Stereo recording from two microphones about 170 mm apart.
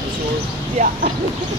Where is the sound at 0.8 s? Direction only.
40° right (ahead or behind).